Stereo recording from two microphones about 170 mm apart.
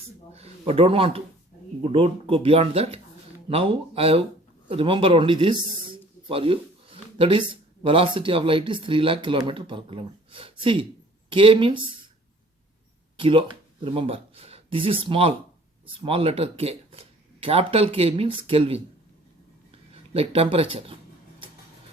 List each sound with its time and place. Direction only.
0.3 s a man's voice: 35° right (ahead or behind)
13.1 s speech: 30° right (ahead or behind)
19.9 s speech: 35° right (ahead or behind)